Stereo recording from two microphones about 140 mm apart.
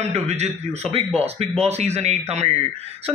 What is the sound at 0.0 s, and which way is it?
A man's voice, 50° right (ahead or behind).